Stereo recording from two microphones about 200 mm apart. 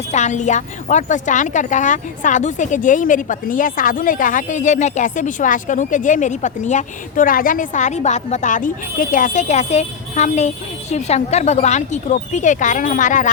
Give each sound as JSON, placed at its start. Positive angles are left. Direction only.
{"t": 0.1, "sound": "a woman's voice", "side_deg": 35}